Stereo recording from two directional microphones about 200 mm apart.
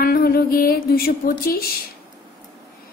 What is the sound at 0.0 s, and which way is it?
Speech, 50° left (ahead or behind).